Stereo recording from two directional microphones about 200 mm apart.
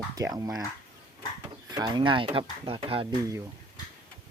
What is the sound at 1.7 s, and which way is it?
Speech, 20° right (ahead or behind).